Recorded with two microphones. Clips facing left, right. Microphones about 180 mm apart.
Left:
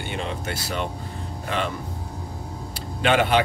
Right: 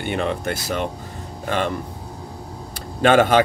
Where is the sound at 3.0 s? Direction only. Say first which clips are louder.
Right 5 dB; 45° right (ahead or behind).